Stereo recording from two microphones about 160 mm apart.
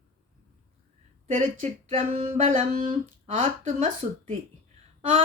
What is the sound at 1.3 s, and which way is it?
Speech, 50° right (ahead or behind).